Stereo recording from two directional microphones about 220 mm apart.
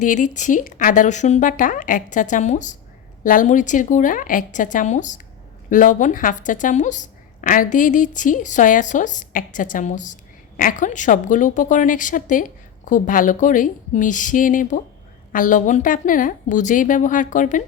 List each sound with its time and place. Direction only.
0.0 s speech: 35° left (ahead or behind)